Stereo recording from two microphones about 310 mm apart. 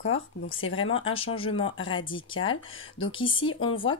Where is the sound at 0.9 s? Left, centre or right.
Centre.